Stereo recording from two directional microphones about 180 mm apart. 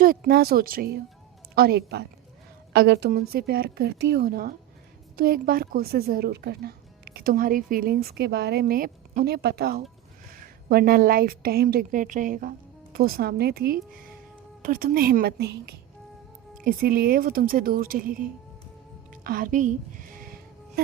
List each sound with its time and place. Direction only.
0.0 s a woman's voice: 50° right (ahead or behind)
19.1 s music: 50° right (ahead or behind)